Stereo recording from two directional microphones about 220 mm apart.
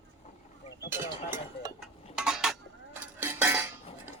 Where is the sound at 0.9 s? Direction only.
10° right (ahead or behind).